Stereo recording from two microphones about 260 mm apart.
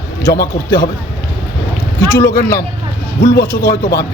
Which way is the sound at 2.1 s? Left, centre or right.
Left.